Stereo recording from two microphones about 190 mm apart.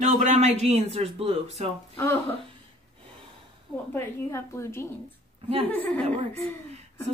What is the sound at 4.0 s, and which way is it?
A woman's voice, 15° left (ahead or behind).